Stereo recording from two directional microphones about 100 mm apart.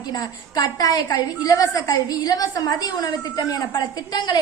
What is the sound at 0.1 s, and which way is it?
A woman's voice, 40° left (ahead or behind).